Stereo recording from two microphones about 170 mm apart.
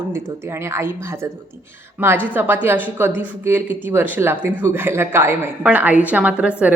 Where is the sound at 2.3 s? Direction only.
10° right (ahead or behind).